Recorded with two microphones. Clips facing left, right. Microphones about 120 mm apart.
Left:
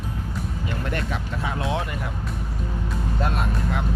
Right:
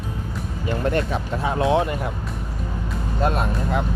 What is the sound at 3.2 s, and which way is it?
Speech, 30° right (ahead or behind).